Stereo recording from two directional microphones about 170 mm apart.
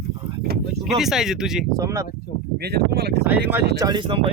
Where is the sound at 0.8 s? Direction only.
Centre (ahead or behind).